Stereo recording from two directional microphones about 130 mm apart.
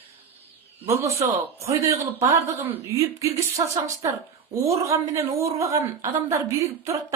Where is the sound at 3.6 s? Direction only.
30° right (ahead or behind).